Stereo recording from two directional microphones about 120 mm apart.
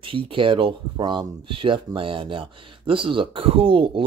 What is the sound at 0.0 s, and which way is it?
Speech, 45° right (ahead or behind).